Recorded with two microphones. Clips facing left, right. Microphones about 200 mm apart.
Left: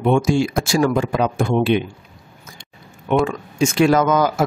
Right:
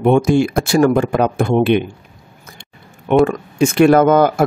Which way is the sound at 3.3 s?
60° right (ahead or behind).